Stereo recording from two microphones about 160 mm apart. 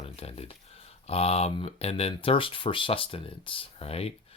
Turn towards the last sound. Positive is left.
turn(degrees=40)  # may be behind; listen again after turning